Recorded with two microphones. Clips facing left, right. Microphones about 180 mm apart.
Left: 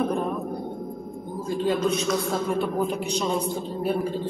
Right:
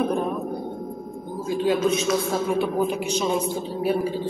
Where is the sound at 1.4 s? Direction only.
90° right.